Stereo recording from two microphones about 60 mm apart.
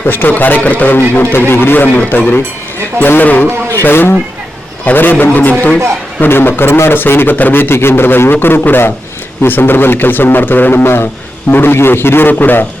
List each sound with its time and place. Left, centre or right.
0.0 s a man's voice: left